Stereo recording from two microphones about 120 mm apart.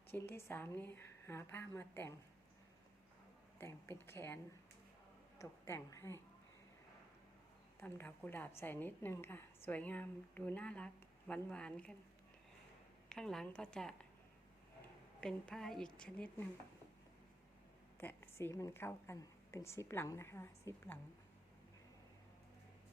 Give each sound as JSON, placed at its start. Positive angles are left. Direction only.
{"t": 0.1, "sound": "a woman's voice", "side_deg": 20}
{"t": 3.6, "sound": "a woman's voice", "side_deg": 20}
{"t": 5.4, "sound": "a woman's voice", "side_deg": 25}
{"t": 7.8, "sound": "a woman's voice", "side_deg": 20}
{"t": 13.1, "sound": "speech", "side_deg": 5}
{"t": 15.2, "sound": "speech", "side_deg": 5}
{"t": 18.0, "sound": "a woman's voice", "side_deg": 15}